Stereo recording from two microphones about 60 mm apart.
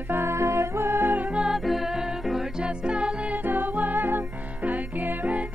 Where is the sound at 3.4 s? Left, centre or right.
Right.